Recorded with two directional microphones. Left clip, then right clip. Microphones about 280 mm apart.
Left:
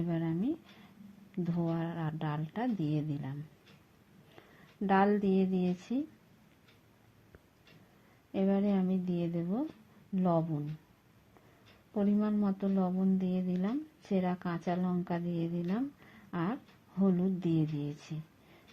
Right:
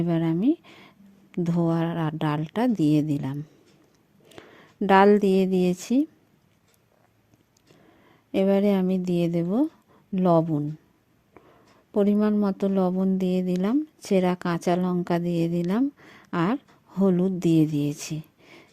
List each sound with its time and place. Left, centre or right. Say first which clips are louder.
0.0 s a woman's voice: right 11 dB; right
8.3 s a woman's voice: right 11 dB; right
11.9 s a woman's voice: right 10 dB; right